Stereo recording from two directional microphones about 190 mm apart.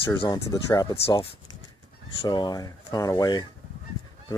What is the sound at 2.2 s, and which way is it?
Speech, 20° left (ahead or behind).